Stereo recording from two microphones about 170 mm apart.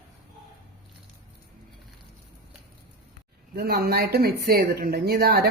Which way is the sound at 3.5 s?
70° right (ahead or behind).